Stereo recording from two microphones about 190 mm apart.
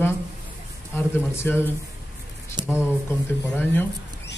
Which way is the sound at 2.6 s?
25° right (ahead or behind).